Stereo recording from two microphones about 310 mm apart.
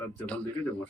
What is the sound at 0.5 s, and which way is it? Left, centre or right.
Speech, centre.